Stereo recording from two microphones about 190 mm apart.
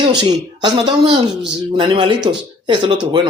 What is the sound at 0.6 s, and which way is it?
Speech, 25° right (ahead or behind).